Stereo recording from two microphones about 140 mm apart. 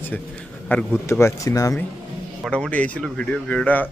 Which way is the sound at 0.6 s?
15° left (ahead or behind).